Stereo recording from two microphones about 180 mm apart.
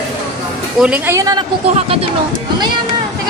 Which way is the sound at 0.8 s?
10° right (ahead or behind).